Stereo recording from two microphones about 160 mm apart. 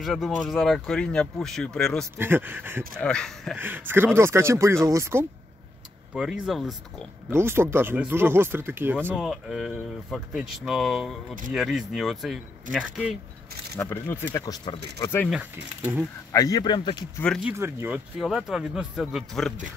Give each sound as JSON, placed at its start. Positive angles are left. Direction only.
{"t": 0.0, "sound": "speech", "side_deg": 0}
{"t": 2.1, "sound": "speech", "side_deg": -15}
{"t": 3.0, "sound": "speech", "side_deg": 5}
{"t": 3.5, "sound": "speech", "side_deg": -10}
{"t": 6.1, "sound": "speech", "side_deg": -5}
{"t": 7.2, "sound": "speech", "side_deg": -15}
{"t": 9.1, "sound": "speech", "side_deg": -5}
{"t": 13.7, "sound": "speech", "side_deg": 15}
{"t": 16.3, "sound": "speech", "side_deg": 20}
{"t": 17.4, "sound": "speech", "side_deg": -15}
{"t": 18.2, "sound": "speech", "side_deg": 0}